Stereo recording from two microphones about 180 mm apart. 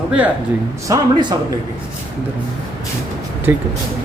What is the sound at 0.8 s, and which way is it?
Speech, 20° right (ahead or behind).